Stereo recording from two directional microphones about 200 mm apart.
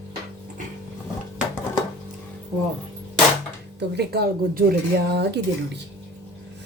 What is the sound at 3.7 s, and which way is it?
Speech, 55° right (ahead or behind).